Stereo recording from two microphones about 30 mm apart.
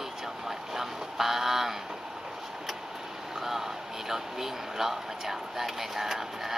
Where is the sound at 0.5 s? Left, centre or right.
Centre.